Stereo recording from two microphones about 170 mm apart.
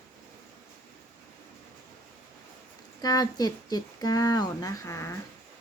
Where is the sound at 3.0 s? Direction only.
25° left (ahead or behind).